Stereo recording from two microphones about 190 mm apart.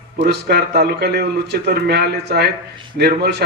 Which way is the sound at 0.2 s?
60° right (ahead or behind).